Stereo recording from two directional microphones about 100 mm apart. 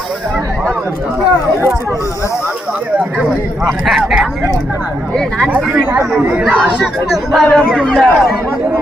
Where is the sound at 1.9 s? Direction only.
30° left (ahead or behind).